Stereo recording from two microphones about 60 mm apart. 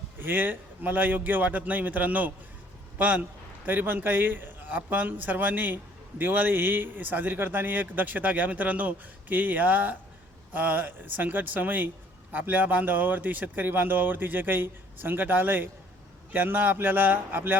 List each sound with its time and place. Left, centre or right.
0.2 s a man's voice: right